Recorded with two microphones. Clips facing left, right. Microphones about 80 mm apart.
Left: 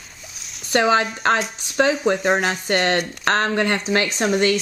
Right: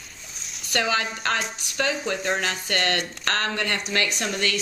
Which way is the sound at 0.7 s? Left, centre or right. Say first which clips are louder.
Left 8 dB; left.